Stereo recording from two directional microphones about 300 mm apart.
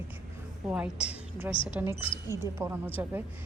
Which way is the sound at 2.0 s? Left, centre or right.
Centre.